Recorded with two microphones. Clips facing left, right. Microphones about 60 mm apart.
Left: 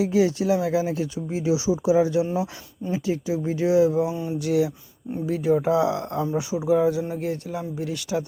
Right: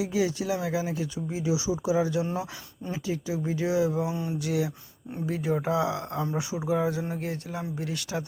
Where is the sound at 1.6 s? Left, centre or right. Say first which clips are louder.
Left 8 dB; left.